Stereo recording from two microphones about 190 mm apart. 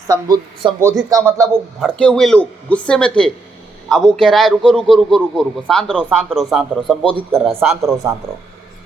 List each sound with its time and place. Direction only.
0.1 s a man's voice: 20° right (ahead or behind)
1.8 s a man's voice: 5° left (ahead or behind)